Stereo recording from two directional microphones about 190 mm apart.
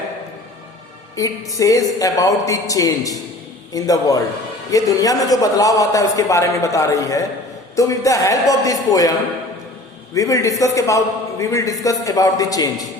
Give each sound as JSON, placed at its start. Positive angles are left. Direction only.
{"t": 1.1, "sound": "a man's voice", "side_deg": 15}
{"t": 10.2, "sound": "a man's voice", "side_deg": 15}